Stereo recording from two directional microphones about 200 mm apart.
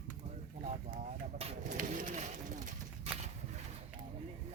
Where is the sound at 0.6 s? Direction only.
35° right (ahead or behind).